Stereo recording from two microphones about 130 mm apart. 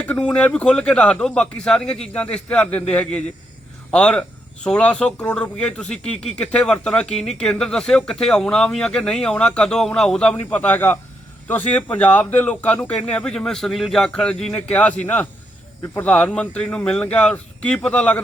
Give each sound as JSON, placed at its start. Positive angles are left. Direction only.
{"t": 0.0, "sound": "speech", "side_deg": 5}